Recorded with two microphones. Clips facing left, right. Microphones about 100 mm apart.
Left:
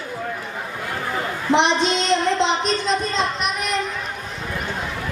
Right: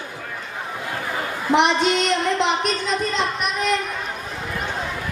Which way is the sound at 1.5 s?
25° left (ahead or behind).